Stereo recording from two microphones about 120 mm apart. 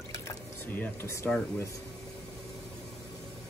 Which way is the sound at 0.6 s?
15° left (ahead or behind).